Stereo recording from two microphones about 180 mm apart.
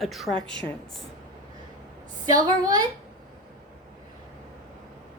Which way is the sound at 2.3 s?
20° right (ahead or behind).